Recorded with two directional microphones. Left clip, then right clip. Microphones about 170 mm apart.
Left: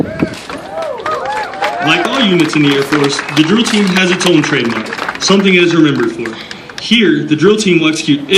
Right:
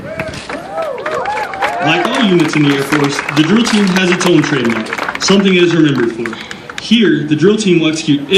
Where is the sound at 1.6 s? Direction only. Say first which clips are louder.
Left 1 dB; 40° right (ahead or behind).